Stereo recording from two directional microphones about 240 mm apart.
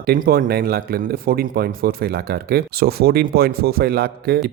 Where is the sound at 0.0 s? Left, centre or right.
Right.